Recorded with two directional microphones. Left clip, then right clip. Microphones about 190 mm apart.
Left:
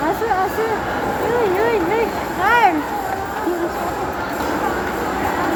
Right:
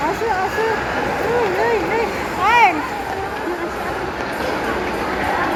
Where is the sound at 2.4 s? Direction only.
50° left (ahead or behind).